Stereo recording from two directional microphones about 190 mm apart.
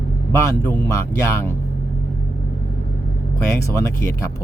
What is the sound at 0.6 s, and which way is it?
Speech, 15° left (ahead or behind).